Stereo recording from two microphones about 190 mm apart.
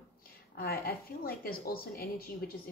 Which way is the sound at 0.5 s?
55° left (ahead or behind).